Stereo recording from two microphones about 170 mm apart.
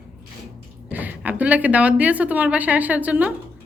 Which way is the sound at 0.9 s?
10° right (ahead or behind).